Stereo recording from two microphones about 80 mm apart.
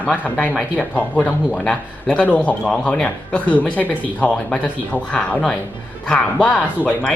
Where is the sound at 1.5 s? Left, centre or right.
Centre.